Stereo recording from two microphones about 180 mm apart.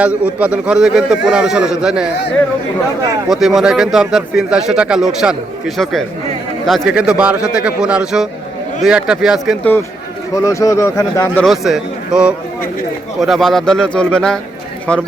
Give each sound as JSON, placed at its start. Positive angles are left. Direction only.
{"t": 0.0, "sound": "speech", "side_deg": -5}
{"t": 3.2, "sound": "speech", "side_deg": 0}
{"t": 10.3, "sound": "speech", "side_deg": 15}
{"t": 11.4, "sound": "speech", "side_deg": 0}